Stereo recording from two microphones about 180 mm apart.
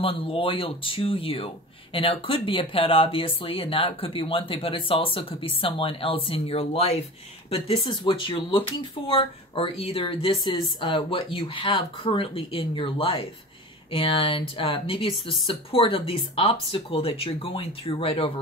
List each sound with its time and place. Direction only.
0.0 s speech: 30° left (ahead or behind)